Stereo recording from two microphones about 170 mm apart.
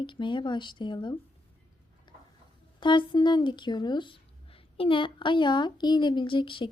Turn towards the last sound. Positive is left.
turn(degrees=30)  # may be behind; listen again after turning